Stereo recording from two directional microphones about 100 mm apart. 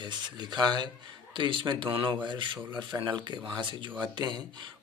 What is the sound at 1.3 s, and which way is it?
Speech, 55° right (ahead or behind).